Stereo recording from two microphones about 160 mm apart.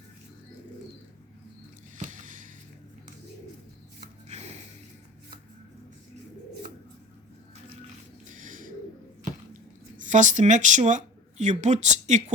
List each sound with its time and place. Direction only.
2.0 s a sound: 55° right (ahead or behind)
4.3 s music: 45° right (ahead or behind)
8.3 s bird: 55° right (ahead or behind)
10.0 s speech: 50° right (ahead or behind)